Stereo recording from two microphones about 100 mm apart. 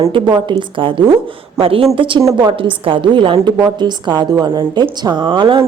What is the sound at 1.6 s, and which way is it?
Speech, 70° right (ahead or behind).